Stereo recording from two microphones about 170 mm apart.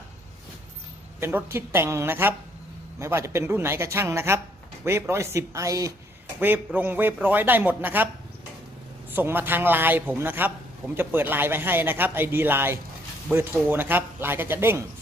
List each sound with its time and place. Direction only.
1.2 s speech: 15° right (ahead or behind)